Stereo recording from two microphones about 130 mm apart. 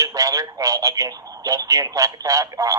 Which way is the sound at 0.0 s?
25° right (ahead or behind).